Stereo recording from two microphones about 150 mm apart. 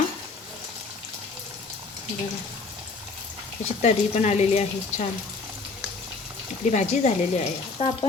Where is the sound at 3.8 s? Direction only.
50° left (ahead or behind).